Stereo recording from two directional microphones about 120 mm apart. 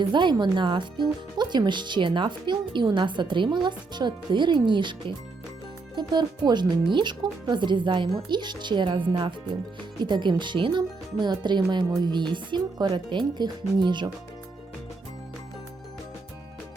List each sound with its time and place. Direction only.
0.0 s speech: 40° right (ahead or behind)